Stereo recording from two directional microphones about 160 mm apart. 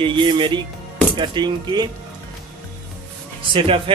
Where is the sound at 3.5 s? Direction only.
35° right (ahead or behind).